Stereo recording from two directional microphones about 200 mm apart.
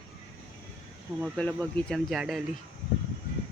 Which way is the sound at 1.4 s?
5° left (ahead or behind).